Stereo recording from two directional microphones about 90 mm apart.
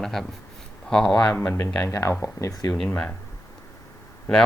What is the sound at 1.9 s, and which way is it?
Speech, 30° left (ahead or behind).